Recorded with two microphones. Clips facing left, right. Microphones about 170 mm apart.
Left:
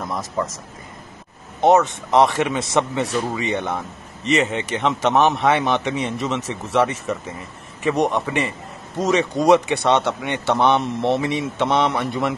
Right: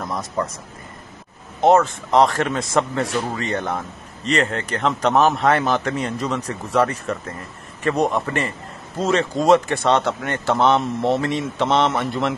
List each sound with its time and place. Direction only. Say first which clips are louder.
0.0 s speech: even; centre (ahead or behind)
1.6 s speech: even; centre (ahead or behind)
8.9 s speech: left 1 dB; 20° left (ahead or behind)
9.2 s speech: even; centre (ahead or behind)